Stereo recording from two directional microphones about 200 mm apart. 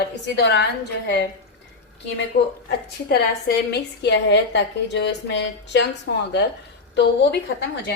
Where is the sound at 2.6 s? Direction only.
55° left (ahead or behind).